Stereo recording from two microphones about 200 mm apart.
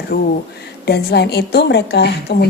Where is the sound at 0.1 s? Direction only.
55° left (ahead or behind).